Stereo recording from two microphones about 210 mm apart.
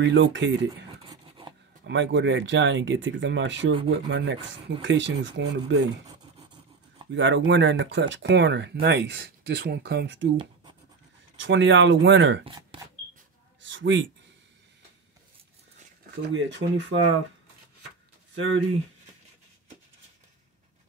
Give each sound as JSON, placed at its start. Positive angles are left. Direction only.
{"t": 0.0, "sound": "speech", "side_deg": -60}
{"t": 1.0, "sound": "a sound", "side_deg": -25}
{"t": 1.9, "sound": "speech", "side_deg": -60}
{"t": 7.1, "sound": "speech", "side_deg": -60}
{"t": 10.3, "sound": "scratch", "side_deg": -25}
{"t": 11.3, "sound": "speech", "side_deg": -60}
{"t": 12.4, "sound": "speech", "side_deg": -20}
{"t": 13.6, "sound": "a man's voice", "side_deg": -60}
{"t": 16.3, "sound": "speech", "side_deg": -60}
{"t": 18.3, "sound": "speech", "side_deg": -65}